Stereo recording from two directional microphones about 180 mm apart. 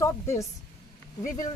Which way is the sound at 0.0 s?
15° left (ahead or behind).